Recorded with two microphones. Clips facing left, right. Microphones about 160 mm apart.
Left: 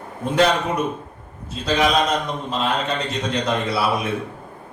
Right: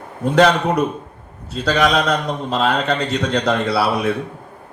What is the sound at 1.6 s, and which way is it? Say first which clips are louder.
A man's voice: right 2 dB; 75° right (ahead or behind).